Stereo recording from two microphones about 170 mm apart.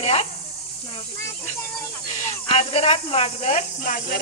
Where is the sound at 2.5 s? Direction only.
40° left (ahead or behind).